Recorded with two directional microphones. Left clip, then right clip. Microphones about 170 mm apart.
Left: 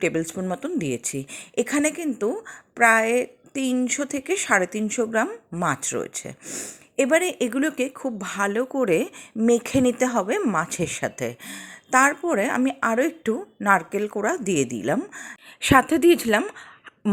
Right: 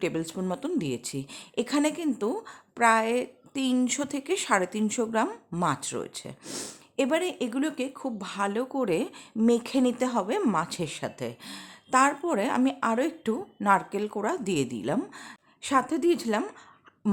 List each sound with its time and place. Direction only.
0.0 s a woman's voice: 15° left (ahead or behind)